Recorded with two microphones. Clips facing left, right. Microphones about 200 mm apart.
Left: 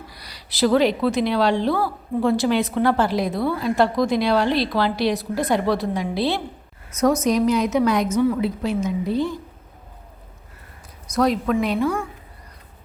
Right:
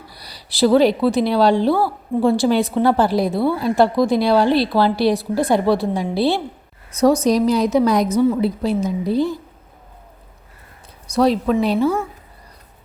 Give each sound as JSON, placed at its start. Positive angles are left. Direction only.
{"t": 0.1, "sound": "speech", "side_deg": -35}
{"t": 11.1, "sound": "a woman's voice", "side_deg": -30}